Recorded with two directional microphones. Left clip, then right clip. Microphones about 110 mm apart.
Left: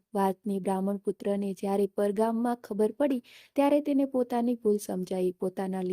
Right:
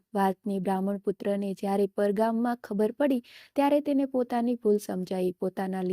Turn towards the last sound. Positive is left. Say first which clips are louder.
# right 1 dB
turn(degrees=-35)  # may be behind; listen again after turning